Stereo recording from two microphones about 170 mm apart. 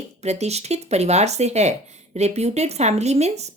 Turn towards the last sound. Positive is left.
turn(degrees=-40)  # may be behind; listen again after turning